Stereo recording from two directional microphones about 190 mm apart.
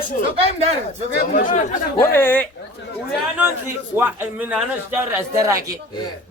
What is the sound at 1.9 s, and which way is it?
Speech, 10° left (ahead or behind).